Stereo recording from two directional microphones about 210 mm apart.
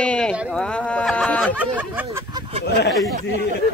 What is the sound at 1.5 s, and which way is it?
Speech, 5° right (ahead or behind).